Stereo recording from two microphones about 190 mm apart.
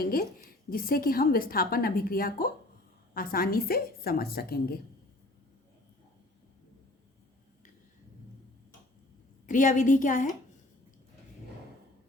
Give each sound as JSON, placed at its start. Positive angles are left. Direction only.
{"t": 0.0, "sound": "a woman's voice", "side_deg": 50}
{"t": 9.5, "sound": "a woman's voice", "side_deg": 45}